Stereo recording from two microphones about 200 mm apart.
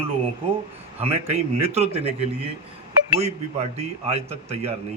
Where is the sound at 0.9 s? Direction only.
30° right (ahead or behind).